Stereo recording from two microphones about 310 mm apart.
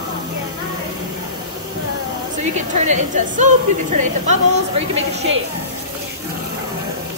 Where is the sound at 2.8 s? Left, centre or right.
Right.